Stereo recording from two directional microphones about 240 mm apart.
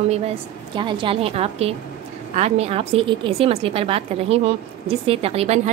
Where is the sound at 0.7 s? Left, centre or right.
Centre.